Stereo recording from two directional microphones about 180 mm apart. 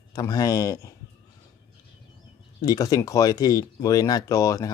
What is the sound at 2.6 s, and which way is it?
Speech, 20° left (ahead or behind).